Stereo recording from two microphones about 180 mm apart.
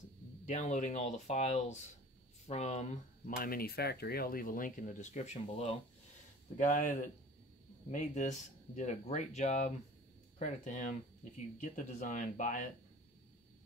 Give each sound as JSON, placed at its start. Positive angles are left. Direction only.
{"t": 0.5, "sound": "speech", "side_deg": 45}
{"t": 3.3, "sound": "speech", "side_deg": 55}